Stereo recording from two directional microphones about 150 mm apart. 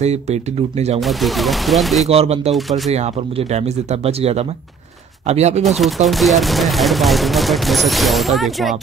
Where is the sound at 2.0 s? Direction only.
45° right (ahead or behind).